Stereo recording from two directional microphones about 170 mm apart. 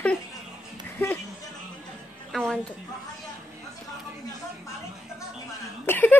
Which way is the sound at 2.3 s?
Centre (ahead or behind).